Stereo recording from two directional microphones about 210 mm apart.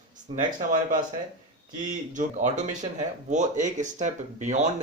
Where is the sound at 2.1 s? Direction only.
35° right (ahead or behind).